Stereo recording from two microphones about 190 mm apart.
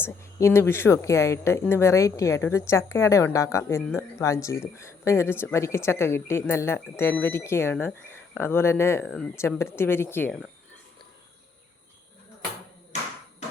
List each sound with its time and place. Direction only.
0.0 s speech: 15° left (ahead or behind)